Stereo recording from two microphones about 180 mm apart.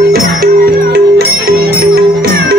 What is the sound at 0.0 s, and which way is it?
Music, 60° right (ahead or behind).